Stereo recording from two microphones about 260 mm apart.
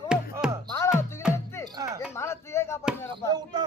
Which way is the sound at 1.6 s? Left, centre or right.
Centre.